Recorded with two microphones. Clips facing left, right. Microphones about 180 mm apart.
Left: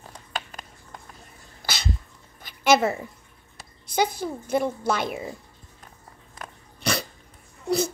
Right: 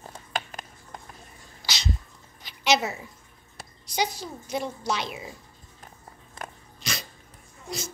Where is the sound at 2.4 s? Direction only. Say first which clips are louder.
Left 5 dB; 50° left (ahead or behind).